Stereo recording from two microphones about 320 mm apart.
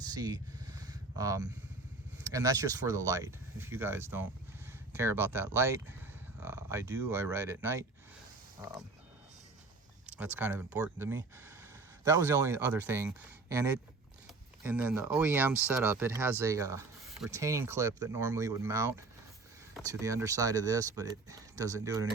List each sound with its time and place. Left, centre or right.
0.0 s vehicle: centre
2.2 s speech: centre
10.1 s speech: centre